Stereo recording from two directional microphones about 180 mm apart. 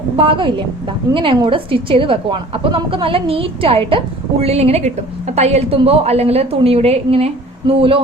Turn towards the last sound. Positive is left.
turn(degrees=-30)  # may be behind; listen again after turning